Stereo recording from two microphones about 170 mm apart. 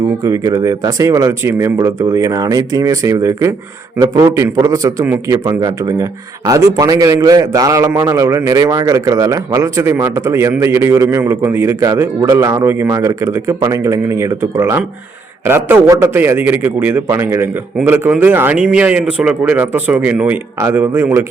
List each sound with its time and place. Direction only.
0.3 s a man's voice: 20° right (ahead or behind)